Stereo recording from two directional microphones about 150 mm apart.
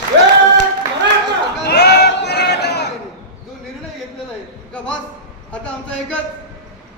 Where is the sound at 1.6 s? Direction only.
90° left.